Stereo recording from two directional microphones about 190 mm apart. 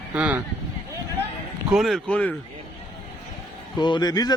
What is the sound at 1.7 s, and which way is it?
Speech, centre (ahead or behind).